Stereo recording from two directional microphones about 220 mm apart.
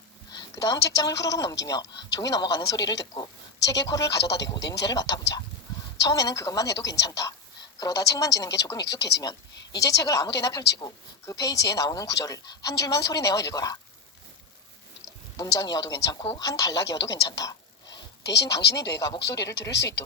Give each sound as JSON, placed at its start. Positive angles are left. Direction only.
{"t": 0.3, "sound": "a woman's voice", "side_deg": 15}
{"t": 4.2, "sound": "speech", "side_deg": 50}
{"t": 4.9, "sound": "speech", "side_deg": 15}
{"t": 15.4, "sound": "speech", "side_deg": 15}
{"t": 17.8, "sound": "a sound", "side_deg": 50}
{"t": 18.9, "sound": "speech", "side_deg": 15}
{"t": 19.7, "sound": "speech", "side_deg": 50}